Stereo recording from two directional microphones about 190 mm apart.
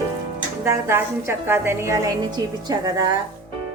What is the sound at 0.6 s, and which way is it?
Speech, 15° right (ahead or behind).